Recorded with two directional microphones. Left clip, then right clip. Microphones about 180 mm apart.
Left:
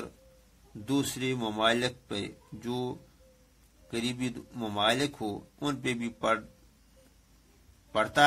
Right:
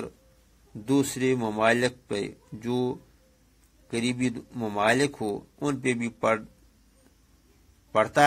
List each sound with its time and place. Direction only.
0.8 s a man's voice: 25° right (ahead or behind)
7.9 s a man's voice: 30° right (ahead or behind)